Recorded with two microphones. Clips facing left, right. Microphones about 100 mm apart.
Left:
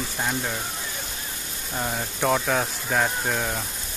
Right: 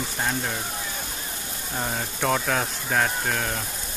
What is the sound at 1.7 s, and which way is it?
Speech, centre (ahead or behind).